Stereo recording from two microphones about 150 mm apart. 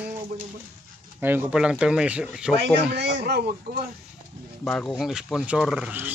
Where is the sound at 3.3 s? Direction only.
90° right.